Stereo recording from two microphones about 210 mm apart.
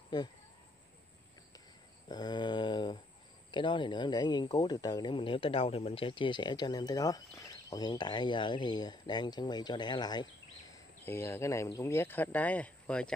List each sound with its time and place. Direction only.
2.0 s speech: 20° left (ahead or behind)